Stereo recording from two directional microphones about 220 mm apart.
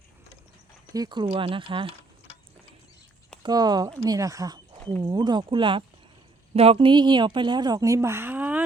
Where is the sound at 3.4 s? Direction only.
20° right (ahead or behind).